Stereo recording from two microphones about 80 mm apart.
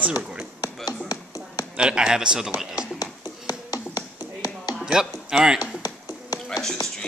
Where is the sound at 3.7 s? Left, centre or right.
Left.